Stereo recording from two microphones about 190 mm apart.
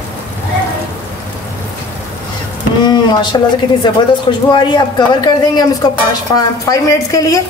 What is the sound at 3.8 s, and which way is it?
A woman's voice, 25° left (ahead or behind).